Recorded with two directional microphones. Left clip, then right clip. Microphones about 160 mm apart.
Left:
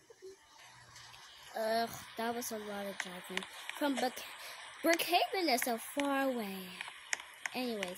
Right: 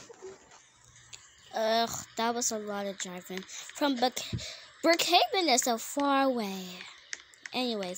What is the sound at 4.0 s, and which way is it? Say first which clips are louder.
Speech: right 7 dB; 25° right (ahead or behind).